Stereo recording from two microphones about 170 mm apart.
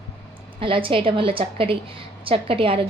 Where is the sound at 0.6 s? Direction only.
30° right (ahead or behind).